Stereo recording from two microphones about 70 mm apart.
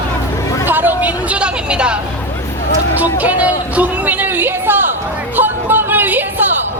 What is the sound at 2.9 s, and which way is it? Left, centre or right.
Speech, right.